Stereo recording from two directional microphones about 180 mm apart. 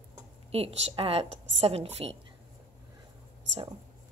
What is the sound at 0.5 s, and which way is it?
A woman's voice, 35° right (ahead or behind).